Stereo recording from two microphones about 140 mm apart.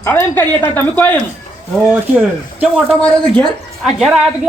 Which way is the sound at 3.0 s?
10° left (ahead or behind).